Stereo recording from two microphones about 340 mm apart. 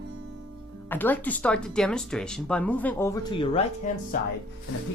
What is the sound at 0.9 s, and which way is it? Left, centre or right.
Speech, centre.